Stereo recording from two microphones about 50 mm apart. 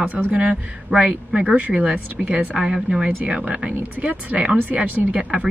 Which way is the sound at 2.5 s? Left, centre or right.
Centre.